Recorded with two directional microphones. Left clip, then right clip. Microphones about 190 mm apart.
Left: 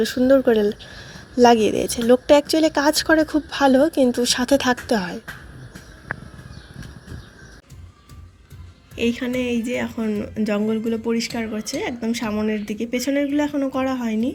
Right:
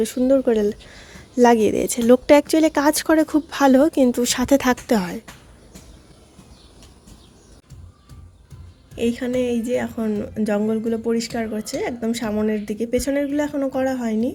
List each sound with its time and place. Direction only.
0.0 s a woman's voice: 10° right (ahead or behind); by 5.2 s 25° right (ahead or behind)
9.0 s a woman's voice: 20° right (ahead or behind)